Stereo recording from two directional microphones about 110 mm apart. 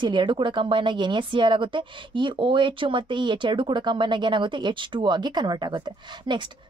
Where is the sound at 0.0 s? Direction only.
45° right (ahead or behind).